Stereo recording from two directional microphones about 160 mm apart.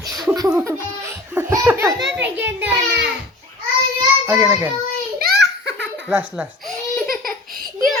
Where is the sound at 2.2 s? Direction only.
10° right (ahead or behind).